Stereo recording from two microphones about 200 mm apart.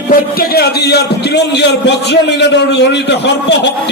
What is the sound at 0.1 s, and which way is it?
A man's voice, 50° left (ahead or behind).